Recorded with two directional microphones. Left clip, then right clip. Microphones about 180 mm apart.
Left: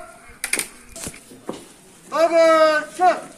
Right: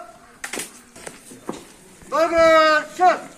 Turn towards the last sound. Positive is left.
turn(degrees=25)  # may be behind; listen again after turning